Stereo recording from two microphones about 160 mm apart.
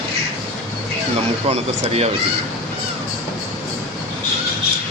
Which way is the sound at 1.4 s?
40° right (ahead or behind).